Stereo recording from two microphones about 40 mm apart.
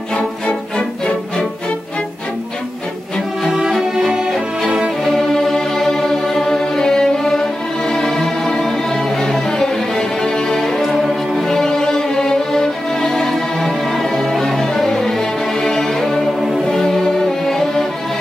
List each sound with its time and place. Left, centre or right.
0.1 s music: left
3.4 s music: centre
5.0 s music: centre
16.3 s music: centre
16.6 s music: centre